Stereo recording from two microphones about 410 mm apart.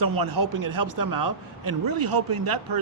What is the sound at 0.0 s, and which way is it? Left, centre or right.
A man's voice, right.